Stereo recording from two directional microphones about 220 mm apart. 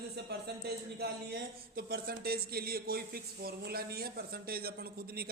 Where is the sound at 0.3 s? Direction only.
45° right (ahead or behind).